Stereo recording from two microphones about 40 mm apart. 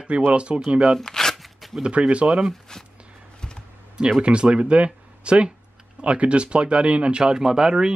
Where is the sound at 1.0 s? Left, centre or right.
Centre.